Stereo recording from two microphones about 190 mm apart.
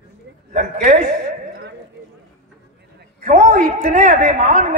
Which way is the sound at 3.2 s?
40° right (ahead or behind).